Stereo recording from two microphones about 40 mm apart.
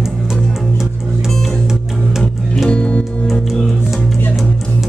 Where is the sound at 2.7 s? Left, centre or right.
Left.